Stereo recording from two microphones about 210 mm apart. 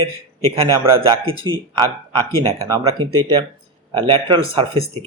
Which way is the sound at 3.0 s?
90° right.